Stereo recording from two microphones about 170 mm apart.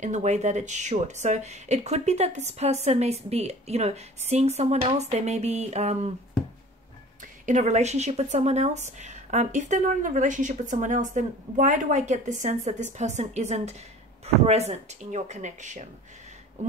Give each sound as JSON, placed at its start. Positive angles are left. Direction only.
{"t": 0.0, "sound": "speech", "side_deg": -45}
{"t": 7.4, "sound": "speech", "side_deg": -45}